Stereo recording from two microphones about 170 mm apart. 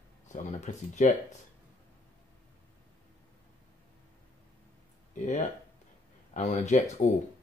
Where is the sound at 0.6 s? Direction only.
45° left (ahead or behind).